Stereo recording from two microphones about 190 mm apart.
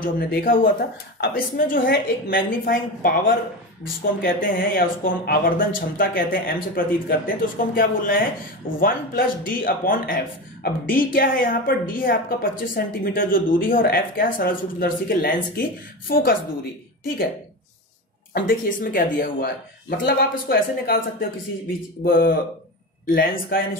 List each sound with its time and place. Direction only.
0.0 s speech: 50° left (ahead or behind)
18.3 s speech: 50° left (ahead or behind)
22.0 s speech: 50° left (ahead or behind)